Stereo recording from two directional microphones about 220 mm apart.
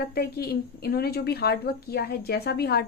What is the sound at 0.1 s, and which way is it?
Speech, 45° left (ahead or behind).